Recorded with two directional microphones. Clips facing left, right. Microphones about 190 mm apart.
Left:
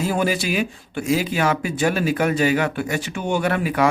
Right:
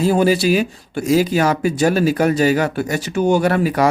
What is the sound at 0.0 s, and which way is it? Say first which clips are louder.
Speech: right 7 dB; 30° right (ahead or behind).